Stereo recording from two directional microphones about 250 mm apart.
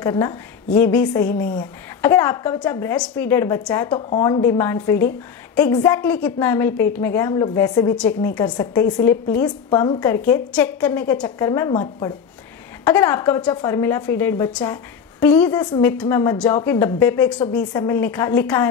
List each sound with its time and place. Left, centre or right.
0.0 s a woman's voice: centre